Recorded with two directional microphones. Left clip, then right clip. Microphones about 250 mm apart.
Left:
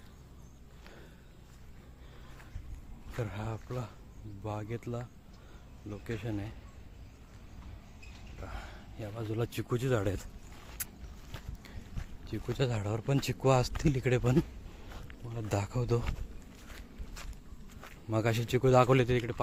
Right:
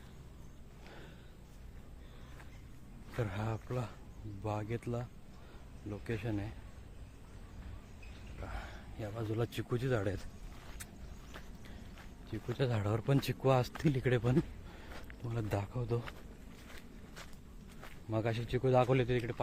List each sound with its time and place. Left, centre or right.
3.2 s speech: centre
8.4 s speech: centre
11.3 s a sound: centre
12.3 s speech: centre
12.7 s speech: centre
15.4 s speech: centre
16.6 s walk: centre
17.7 s speech: centre